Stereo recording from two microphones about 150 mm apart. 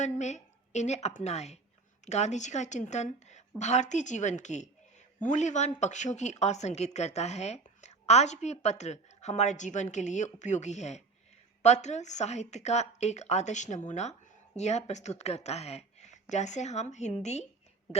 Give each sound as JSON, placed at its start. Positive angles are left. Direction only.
{"t": 0.0, "sound": "a woman's voice", "side_deg": 50}